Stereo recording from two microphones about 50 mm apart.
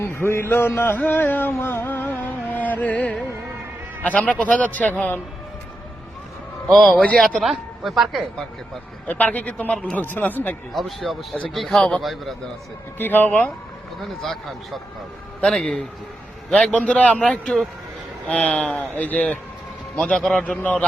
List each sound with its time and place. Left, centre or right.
0.0 s a sound: left
4.0 s a man's voice: left
4.6 s speech: left
6.7 s a woman's voice: centre
9.0 s speech: left
10.8 s a woman's voice: centre
13.0 s speech: left
14.0 s a woman's voice: centre
16.7 s a man's voice: left
20.1 s speech: centre
20.4 s speech: left